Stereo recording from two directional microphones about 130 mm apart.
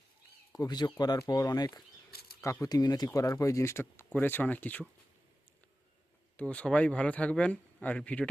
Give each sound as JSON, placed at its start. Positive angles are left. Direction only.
{"t": 0.5, "sound": "speech", "side_deg": 30}
{"t": 6.3, "sound": "speech", "side_deg": 10}